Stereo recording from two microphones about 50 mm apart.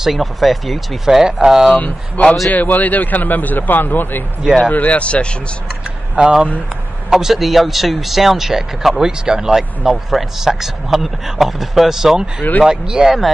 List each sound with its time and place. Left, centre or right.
0.0 s speech: centre
1.7 s speech: left
4.6 s speech: left
7.1 s a man's voice: centre